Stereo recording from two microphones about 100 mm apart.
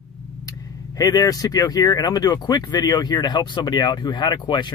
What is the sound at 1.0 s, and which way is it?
Speech, 40° left (ahead or behind).